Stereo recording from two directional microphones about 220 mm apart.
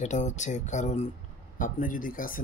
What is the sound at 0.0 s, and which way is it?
Speech, 35° left (ahead or behind).